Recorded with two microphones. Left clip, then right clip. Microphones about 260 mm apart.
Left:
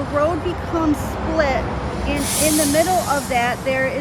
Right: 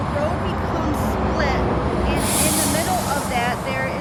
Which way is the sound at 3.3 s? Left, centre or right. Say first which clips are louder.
Left 3 dB; centre.